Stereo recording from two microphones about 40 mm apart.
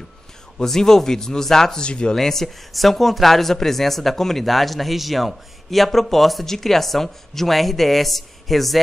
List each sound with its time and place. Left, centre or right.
0.6 s a man's voice: centre
1.9 s speech: left
2.1 s speech: centre